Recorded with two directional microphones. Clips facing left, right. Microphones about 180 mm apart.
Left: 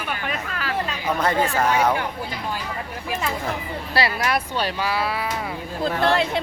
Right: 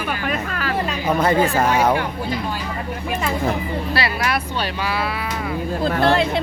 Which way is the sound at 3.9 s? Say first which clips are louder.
Left 2 dB; 40° left (ahead or behind).